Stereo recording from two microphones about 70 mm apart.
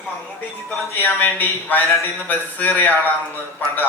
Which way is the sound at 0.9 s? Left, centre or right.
Left.